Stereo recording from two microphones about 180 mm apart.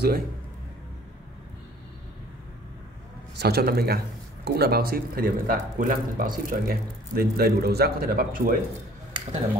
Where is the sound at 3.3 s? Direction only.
60° right (ahead or behind).